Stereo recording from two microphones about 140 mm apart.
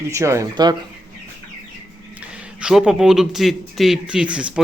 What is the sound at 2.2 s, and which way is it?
Speech, 5° right (ahead or behind).